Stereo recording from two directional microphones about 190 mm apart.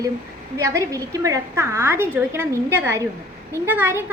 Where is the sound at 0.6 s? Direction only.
15° right (ahead or behind).